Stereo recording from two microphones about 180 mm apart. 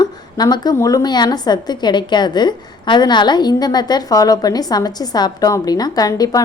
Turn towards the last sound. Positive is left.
turn(degrees=20)  # may be behind; listen again after turning